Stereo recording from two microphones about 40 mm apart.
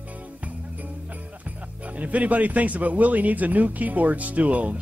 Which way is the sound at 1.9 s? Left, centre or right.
Right.